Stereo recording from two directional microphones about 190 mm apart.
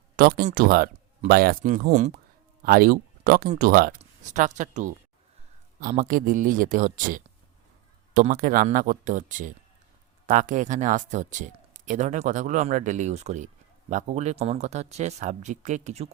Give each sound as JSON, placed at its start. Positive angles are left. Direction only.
{"t": 0.2, "sound": "speech", "side_deg": -50}
{"t": 2.6, "sound": "speech", "side_deg": -50}